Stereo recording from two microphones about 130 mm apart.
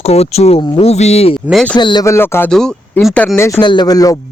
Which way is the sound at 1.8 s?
35° left (ahead or behind).